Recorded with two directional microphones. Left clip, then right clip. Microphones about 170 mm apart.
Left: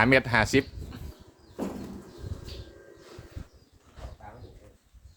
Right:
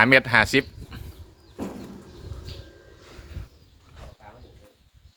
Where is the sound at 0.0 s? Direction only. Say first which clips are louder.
Right 5 dB; 5° left (ahead or behind).